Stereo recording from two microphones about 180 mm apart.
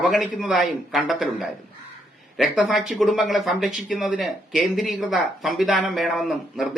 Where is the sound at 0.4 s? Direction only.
Centre (ahead or behind).